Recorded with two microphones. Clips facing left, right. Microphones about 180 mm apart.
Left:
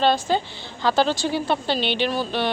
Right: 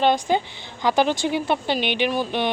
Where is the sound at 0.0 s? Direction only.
15° right (ahead or behind).